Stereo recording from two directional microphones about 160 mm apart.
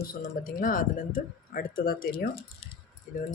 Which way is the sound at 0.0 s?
70° left (ahead or behind).